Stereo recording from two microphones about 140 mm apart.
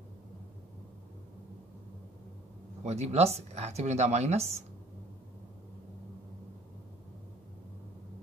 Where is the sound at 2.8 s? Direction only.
50° right (ahead or behind).